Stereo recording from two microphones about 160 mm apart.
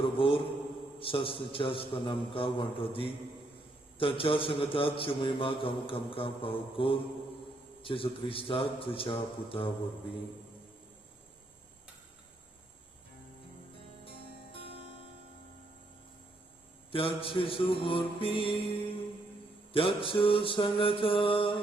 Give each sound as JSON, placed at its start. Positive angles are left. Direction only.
{"t": 0.0, "sound": "a man's voice", "side_deg": 35}
{"t": 14.0, "sound": "music", "side_deg": 35}
{"t": 16.9, "sound": "a man's voice", "side_deg": 35}
{"t": 19.7, "sound": "a man's voice", "side_deg": 35}